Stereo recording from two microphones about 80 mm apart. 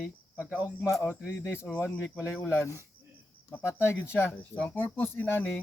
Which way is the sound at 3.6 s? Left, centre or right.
Left.